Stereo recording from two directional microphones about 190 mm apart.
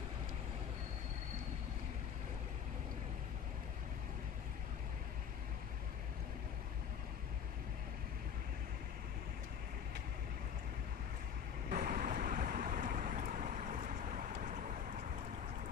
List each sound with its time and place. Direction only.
11.7 s vehicle: 50° right (ahead or behind)